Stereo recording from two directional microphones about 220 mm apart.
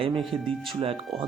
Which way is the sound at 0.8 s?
25° right (ahead or behind).